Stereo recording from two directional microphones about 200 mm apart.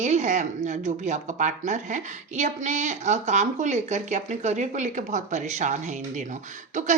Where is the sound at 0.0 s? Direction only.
35° right (ahead or behind).